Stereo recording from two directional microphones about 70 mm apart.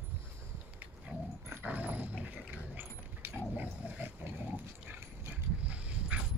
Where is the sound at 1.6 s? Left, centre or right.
Right.